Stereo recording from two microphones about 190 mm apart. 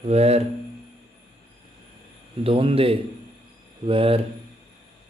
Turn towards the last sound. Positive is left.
turn(degrees=-30)  # may be behind; listen again after turning